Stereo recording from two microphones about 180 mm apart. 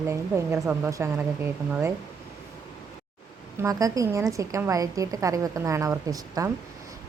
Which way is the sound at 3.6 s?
20° right (ahead or behind).